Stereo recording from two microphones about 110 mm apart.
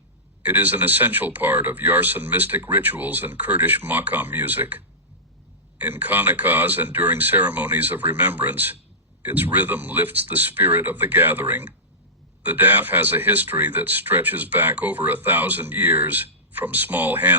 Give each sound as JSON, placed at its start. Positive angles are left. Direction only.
{"t": 0.4, "sound": "speech", "side_deg": -15}
{"t": 5.8, "sound": "speech", "side_deg": -15}